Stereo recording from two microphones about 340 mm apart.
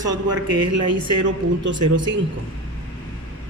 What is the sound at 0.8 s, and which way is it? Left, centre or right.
Speech, right.